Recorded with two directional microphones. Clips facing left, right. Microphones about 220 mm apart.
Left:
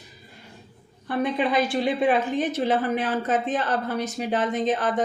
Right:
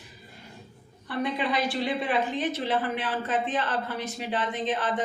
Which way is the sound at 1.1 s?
50° left (ahead or behind).